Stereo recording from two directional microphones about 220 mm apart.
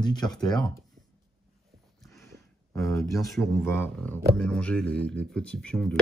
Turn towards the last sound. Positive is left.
turn(degrees=5)  # may be behind; listen again after turning